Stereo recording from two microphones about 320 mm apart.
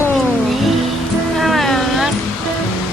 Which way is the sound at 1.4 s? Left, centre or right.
Centre.